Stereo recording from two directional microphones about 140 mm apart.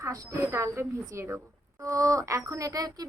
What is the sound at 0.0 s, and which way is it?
Speech, 25° right (ahead or behind).